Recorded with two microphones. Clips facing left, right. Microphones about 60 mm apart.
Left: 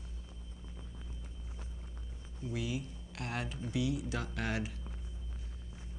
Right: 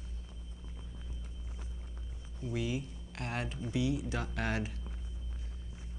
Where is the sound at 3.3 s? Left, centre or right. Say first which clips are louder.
Right 1 dB; centre.